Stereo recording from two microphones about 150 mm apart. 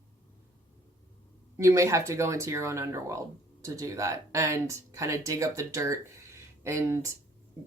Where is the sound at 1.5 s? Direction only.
20° right (ahead or behind).